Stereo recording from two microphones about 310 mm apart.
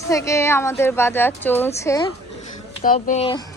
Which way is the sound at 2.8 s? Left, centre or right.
Left.